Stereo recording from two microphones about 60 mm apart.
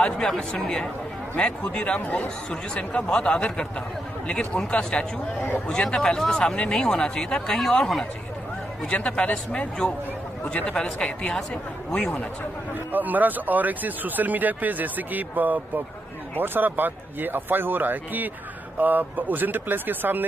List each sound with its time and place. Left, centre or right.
0.0 s speech: centre; by 2.2 s left
2.2 s speech: centre
12.9 s a man's voice: right